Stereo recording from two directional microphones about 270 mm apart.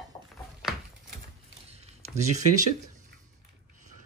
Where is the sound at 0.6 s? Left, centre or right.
Centre.